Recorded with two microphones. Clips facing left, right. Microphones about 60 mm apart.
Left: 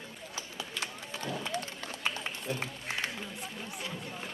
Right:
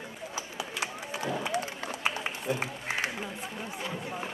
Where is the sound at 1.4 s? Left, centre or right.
Centre.